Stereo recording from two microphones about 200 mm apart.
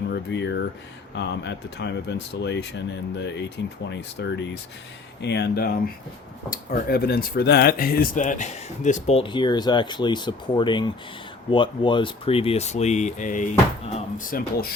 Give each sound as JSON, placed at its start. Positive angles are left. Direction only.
{"t": 0.1, "sound": "speech", "side_deg": 60}